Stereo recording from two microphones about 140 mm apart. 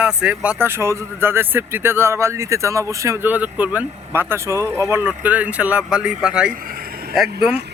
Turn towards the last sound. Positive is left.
turn(degrees=-10)  # may be behind; listen again after turning